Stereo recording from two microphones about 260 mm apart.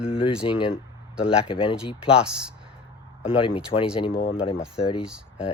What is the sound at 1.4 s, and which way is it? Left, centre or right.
Speech, centre.